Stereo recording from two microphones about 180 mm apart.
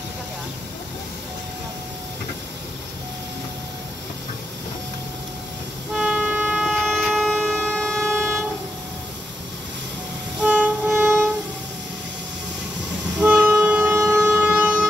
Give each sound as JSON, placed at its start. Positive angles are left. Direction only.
{"t": 5.9, "sound": "train", "side_deg": -5}
{"t": 10.4, "sound": "music", "side_deg": -5}
{"t": 13.2, "sound": "vehicle", "side_deg": -5}